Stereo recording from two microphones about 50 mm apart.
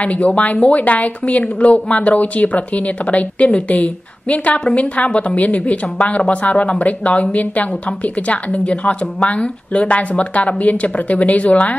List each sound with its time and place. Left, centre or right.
0.0 s a woman's voice: left